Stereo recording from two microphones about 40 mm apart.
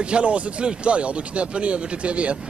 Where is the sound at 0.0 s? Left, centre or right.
Right.